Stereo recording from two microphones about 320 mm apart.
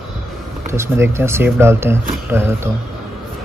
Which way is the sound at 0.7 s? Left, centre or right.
Centre.